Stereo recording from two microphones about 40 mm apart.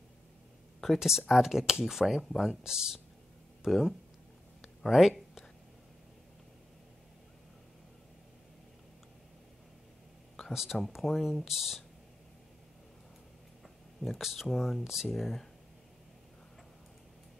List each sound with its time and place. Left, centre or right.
0.9 s speech: centre
2.6 s speech: centre
4.6 s a sound: centre
10.5 s speech: centre
14.0 s speech: centre